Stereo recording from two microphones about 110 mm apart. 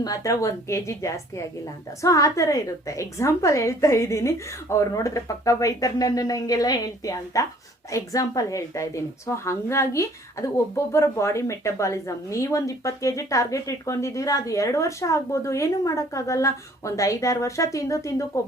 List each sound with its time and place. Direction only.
0.0 s a woman's voice: 30° left (ahead or behind)